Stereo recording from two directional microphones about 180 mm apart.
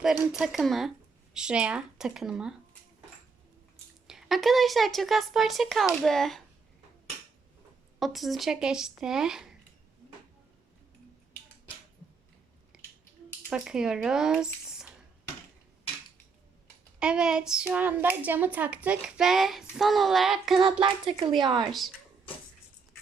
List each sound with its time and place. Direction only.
0.0 s speech: 5° right (ahead or behind)
4.0 s speech: centre (ahead or behind)
7.9 s speech: centre (ahead or behind)
12.7 s a sound: 5° right (ahead or behind)
13.5 s speech: 5° right (ahead or behind)
17.0 s speech: 5° right (ahead or behind)
20.6 s speech: 25° right (ahead or behind)
21.7 s speech: centre (ahead or behind)